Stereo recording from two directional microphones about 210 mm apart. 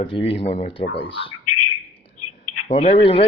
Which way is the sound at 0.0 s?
25° left (ahead or behind).